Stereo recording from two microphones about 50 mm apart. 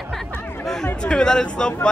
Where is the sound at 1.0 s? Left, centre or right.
Centre.